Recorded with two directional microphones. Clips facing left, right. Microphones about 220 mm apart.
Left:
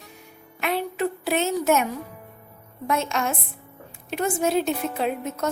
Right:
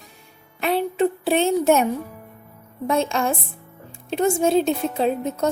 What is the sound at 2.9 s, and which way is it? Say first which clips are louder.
A woman's voice: right 4 dB; 30° right (ahead or behind).